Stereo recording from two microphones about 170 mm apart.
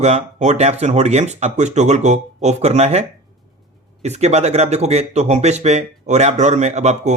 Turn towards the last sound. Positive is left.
turn(degrees=-40)  # may be behind; listen again after turning